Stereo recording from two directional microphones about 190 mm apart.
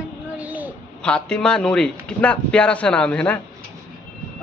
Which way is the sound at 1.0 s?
5° left (ahead or behind).